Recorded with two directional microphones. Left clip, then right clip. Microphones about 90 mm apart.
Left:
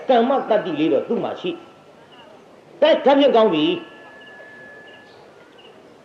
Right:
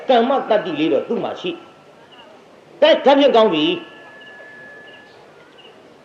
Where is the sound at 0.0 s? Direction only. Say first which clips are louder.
Right 2 dB; 35° right (ahead or behind).